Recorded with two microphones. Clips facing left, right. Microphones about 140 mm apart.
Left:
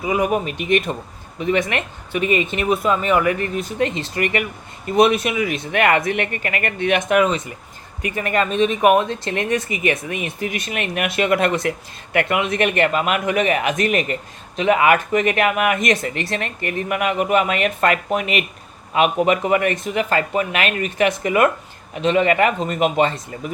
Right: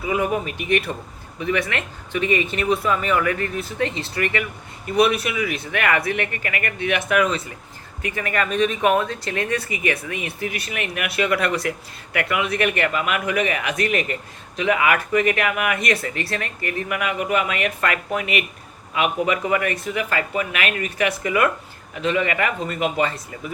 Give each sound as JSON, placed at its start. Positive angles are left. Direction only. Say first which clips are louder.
{"t": 0.0, "sound": "speech", "louder": "left 3 dB", "side_deg": 15}
{"t": 3.2, "sound": "speech", "louder": "left 3 dB", "side_deg": 15}